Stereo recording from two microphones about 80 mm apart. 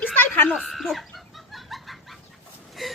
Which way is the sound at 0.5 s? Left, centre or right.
Centre.